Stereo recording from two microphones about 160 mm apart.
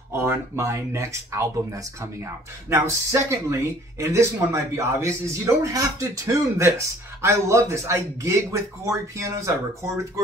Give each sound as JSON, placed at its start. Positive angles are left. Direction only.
{"t": 0.1, "sound": "speech", "side_deg": -15}
{"t": 2.7, "sound": "a man's voice", "side_deg": -20}